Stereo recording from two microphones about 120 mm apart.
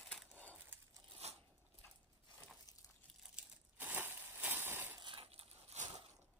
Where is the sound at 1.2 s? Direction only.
65° right (ahead or behind).